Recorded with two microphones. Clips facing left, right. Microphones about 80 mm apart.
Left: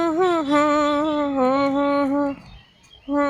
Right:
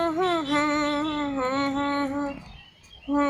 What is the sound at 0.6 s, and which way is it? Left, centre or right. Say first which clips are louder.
Music: left 6 dB; left.